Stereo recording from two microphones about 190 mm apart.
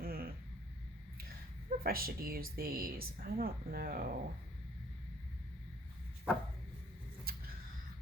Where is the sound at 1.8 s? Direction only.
50° right (ahead or behind).